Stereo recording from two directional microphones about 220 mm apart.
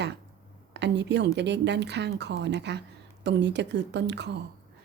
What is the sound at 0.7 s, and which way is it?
A woman's voice, 50° right (ahead or behind).